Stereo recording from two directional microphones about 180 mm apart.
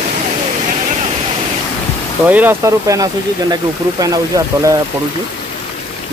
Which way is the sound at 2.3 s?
10° right (ahead or behind).